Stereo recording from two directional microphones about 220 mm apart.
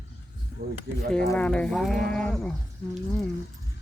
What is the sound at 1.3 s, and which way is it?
Speech, 5° left (ahead or behind).